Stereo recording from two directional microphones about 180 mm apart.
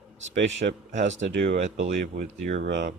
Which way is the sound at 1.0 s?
90° right.